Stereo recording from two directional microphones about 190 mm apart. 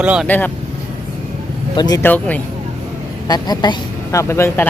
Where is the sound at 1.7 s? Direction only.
20° left (ahead or behind).